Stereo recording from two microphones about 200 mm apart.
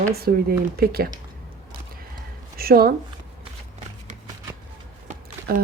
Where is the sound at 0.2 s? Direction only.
50° right (ahead or behind).